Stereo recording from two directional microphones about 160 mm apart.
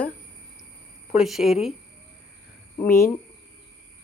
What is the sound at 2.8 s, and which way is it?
Speech, 15° left (ahead or behind).